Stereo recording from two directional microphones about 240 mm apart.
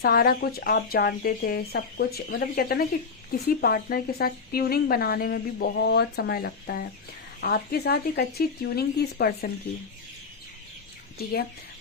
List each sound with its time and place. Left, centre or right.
0.0 s speech: left
11.2 s speech: left